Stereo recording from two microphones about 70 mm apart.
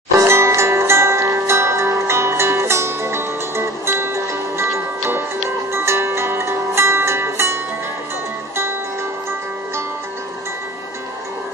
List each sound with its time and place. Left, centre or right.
0.3 s music: right